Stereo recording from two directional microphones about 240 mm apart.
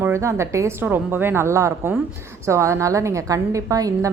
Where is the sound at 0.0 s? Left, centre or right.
Centre.